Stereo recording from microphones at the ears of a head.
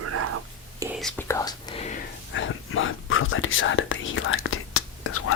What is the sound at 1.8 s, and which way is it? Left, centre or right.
Whispering, left.